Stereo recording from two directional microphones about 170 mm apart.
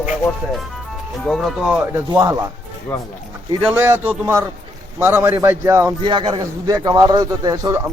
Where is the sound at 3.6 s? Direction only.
10° right (ahead or behind).